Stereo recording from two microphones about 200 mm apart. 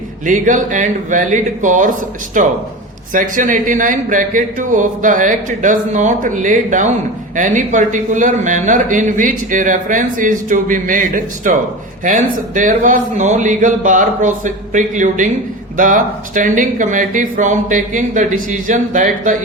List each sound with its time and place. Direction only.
0.3 s a man's voice: 40° right (ahead or behind)